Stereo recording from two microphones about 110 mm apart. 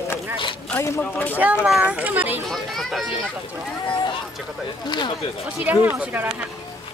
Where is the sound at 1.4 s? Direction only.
15° right (ahead or behind).